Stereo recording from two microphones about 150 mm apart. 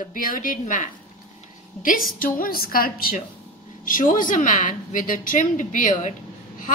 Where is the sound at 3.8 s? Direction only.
65° left (ahead or behind).